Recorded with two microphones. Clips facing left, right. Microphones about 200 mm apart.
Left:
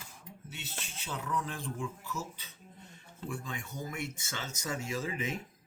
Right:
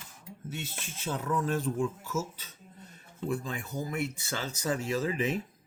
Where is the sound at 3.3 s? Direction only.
35° right (ahead or behind).